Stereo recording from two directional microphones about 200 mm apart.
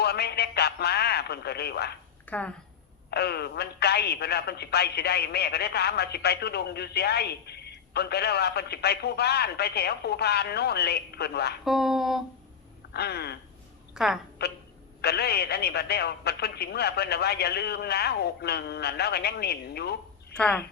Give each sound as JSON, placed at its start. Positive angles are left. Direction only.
{"t": 0.0, "sound": "a man's voice", "side_deg": 55}
{"t": 2.2, "sound": "speech", "side_deg": 5}
{"t": 3.1, "sound": "speech", "side_deg": 55}
{"t": 11.6, "sound": "a sound", "side_deg": 0}
{"t": 12.9, "sound": "speech", "side_deg": 55}
{"t": 13.9, "sound": "a woman's voice", "side_deg": 0}
{"t": 14.4, "sound": "speech", "side_deg": 55}
{"t": 20.3, "sound": "speech", "side_deg": 5}